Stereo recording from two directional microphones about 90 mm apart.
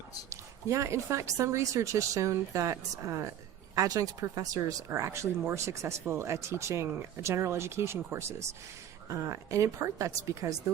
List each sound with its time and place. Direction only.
0.3 s speech: 35° right (ahead or behind)